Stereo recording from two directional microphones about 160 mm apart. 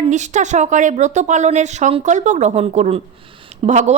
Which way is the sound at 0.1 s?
50° right (ahead or behind).